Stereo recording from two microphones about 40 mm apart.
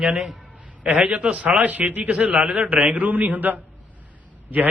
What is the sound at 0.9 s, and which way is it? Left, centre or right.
A man's voice, right.